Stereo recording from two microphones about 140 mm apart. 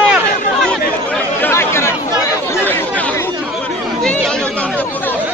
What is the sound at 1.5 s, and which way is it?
Chatter, 20° left (ahead or behind).